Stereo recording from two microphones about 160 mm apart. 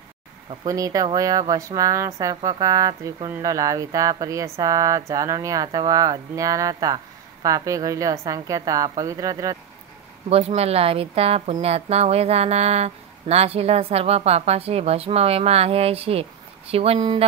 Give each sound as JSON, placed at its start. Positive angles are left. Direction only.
{"t": 0.7, "sound": "speech", "side_deg": -20}
{"t": 10.3, "sound": "speech", "side_deg": -40}